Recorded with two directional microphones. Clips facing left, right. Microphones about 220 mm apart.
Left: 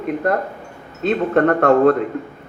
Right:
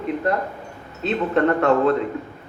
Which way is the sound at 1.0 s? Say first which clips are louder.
Left 3 dB; 50° left (ahead or behind).